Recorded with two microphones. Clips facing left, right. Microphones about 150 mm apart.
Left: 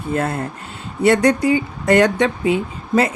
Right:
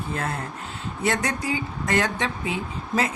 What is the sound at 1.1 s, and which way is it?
Speech, 65° left (ahead or behind).